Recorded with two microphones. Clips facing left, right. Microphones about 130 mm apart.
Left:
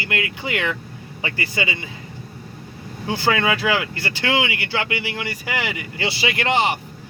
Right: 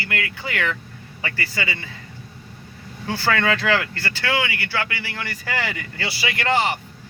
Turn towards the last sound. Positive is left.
turn(degrees=20)  # may be behind; listen again after turning